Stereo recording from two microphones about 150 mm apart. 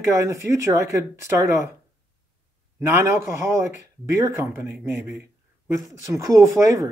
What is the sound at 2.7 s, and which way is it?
Speech, 15° right (ahead or behind).